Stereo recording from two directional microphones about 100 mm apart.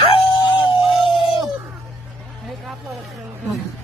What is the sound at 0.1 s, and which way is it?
Dog, 60° left (ahead or behind).